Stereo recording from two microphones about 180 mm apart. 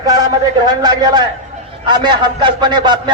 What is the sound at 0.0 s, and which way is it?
A man's voice, 20° right (ahead or behind).